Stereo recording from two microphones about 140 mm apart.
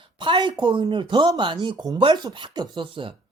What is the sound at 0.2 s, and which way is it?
Speech, 35° right (ahead or behind).